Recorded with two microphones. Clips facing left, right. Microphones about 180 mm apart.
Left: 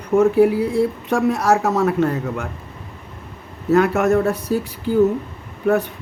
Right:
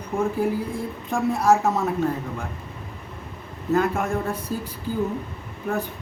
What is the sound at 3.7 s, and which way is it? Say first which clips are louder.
Speech: left 7 dB; 80° left.